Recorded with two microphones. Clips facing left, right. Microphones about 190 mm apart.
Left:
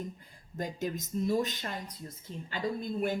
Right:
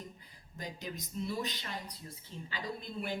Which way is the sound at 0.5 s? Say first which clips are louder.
Left 8 dB; 50° left (ahead or behind).